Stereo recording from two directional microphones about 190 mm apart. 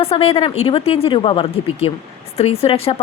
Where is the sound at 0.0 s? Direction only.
30° left (ahead or behind).